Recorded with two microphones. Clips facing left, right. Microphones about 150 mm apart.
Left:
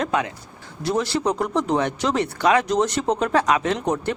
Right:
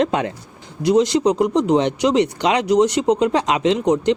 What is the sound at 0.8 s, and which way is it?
Speech, 15° right (ahead or behind).